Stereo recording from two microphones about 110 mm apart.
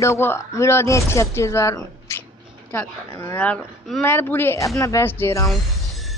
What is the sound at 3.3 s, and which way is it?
Speech, 10° left (ahead or behind).